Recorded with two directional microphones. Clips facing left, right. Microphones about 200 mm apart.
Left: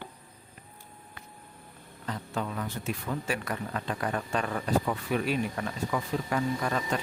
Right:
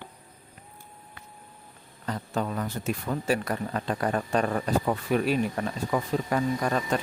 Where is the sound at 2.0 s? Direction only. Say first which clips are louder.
Right 4 dB; 40° right (ahead or behind).